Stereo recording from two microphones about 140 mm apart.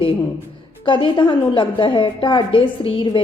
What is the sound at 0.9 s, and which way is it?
A woman's voice, 35° left (ahead or behind).